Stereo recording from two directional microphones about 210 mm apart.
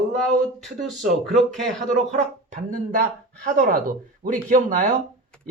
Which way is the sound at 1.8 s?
35° right (ahead or behind).